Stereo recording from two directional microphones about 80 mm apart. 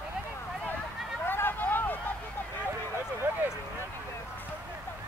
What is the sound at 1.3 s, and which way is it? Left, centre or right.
Vehicle, left.